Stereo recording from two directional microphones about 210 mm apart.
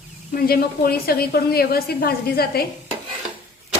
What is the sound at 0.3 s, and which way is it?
A woman's voice, 45° left (ahead or behind).